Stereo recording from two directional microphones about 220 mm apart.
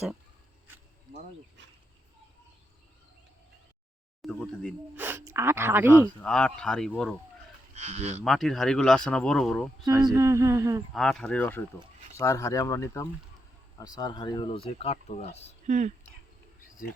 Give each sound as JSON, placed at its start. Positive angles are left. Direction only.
{"t": 4.2, "sound": "speech", "side_deg": 5}
{"t": 4.9, "sound": "speech", "side_deg": -10}
{"t": 6.2, "sound": "speech", "side_deg": 5}
{"t": 7.8, "sound": "speech", "side_deg": -30}
{"t": 8.2, "sound": "speech", "side_deg": 0}
{"t": 9.8, "sound": "speech", "side_deg": -20}
{"t": 10.9, "sound": "speech", "side_deg": 0}
{"t": 15.6, "sound": "speech", "side_deg": -35}